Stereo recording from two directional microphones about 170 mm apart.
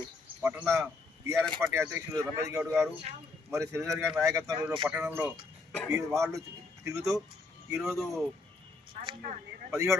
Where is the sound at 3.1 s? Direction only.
40° right (ahead or behind).